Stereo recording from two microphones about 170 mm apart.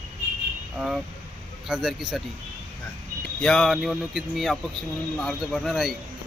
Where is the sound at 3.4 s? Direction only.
5° left (ahead or behind).